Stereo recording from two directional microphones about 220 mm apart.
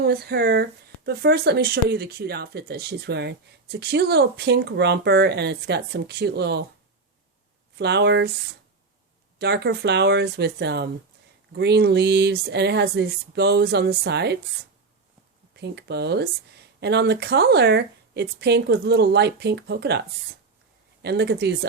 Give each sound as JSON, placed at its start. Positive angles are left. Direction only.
{"t": 0.0, "sound": "speech", "side_deg": -45}
{"t": 7.8, "sound": "speech", "side_deg": -50}
{"t": 9.4, "sound": "speech", "side_deg": -50}
{"t": 15.5, "sound": "speech", "side_deg": -50}